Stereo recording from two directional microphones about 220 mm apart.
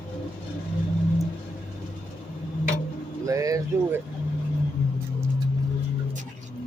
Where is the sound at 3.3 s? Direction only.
15° right (ahead or behind).